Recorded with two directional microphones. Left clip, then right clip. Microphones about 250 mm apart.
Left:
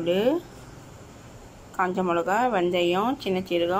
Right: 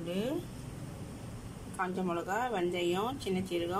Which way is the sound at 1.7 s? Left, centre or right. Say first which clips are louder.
Left 11 dB; centre.